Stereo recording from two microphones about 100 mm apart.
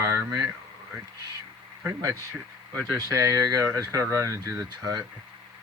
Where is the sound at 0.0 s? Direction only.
30° right (ahead or behind).